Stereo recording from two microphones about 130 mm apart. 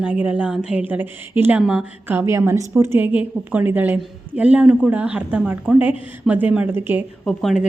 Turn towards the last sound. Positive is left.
turn(degrees=0)  # may be behind; listen again after turning